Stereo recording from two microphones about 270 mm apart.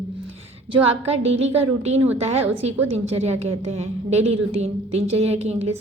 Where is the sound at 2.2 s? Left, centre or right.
Right.